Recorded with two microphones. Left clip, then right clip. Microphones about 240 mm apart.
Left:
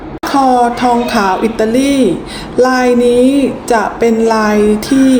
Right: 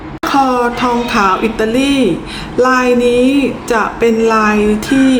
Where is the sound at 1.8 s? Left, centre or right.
Right.